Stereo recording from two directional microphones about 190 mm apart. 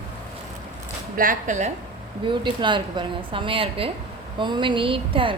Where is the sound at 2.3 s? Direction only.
25° right (ahead or behind).